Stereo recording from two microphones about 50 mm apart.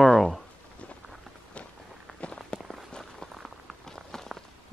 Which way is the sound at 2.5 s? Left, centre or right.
Centre.